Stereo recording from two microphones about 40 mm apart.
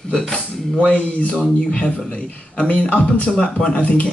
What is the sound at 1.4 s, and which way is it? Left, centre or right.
Speech, left.